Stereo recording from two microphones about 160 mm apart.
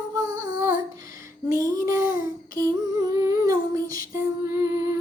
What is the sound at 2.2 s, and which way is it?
Humming, 20° right (ahead or behind).